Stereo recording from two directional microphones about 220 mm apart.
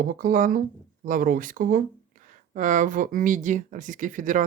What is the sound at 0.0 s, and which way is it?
Speech, 40° right (ahead or behind).